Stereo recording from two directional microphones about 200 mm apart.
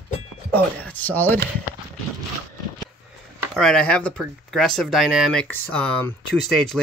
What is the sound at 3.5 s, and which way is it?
Speech, 5° left (ahead or behind).